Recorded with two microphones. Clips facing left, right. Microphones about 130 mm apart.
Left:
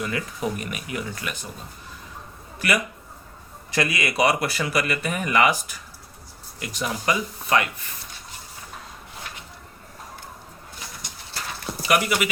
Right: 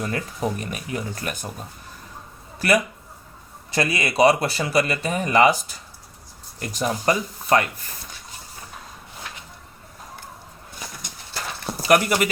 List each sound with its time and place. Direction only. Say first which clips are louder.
0.0 s speech: right 1 dB; 40° right (ahead or behind)
2.6 s a man's voice: right 4 dB; 35° right (ahead or behind)
6.6 s speech: right 4 dB; 40° right (ahead or behind)
11.6 s a sound: right 4 dB; 40° right (ahead or behind)